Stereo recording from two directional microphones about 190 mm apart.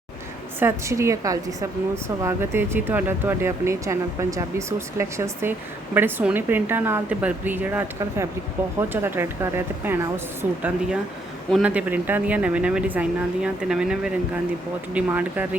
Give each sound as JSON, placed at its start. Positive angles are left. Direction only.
{"t": 0.6, "sound": "speech", "side_deg": -15}